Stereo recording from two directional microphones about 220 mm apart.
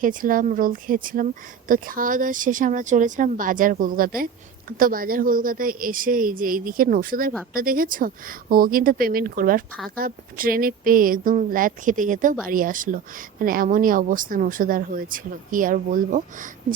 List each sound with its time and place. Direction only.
0.0 s speech: 40° right (ahead or behind)